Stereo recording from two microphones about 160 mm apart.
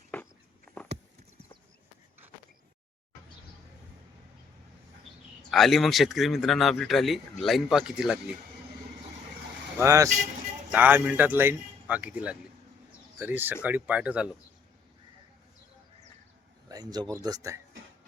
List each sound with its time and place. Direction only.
0.1 s a sound: 10° left (ahead or behind)
5.5 s speech: centre (ahead or behind)
9.7 s speech: 20° right (ahead or behind)
16.6 s speech: 25° right (ahead or behind)